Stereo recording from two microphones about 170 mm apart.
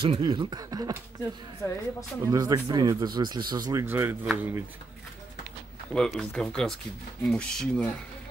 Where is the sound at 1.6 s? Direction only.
20° left (ahead or behind).